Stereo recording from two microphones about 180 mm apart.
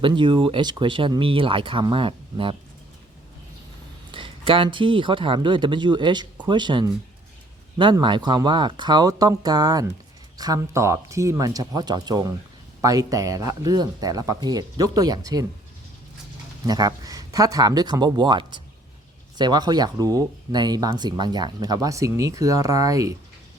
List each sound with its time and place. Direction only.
0.0 s speech: 25° right (ahead or behind)
4.1 s speech: 30° right (ahead or behind)
16.6 s speech: 20° right (ahead or behind)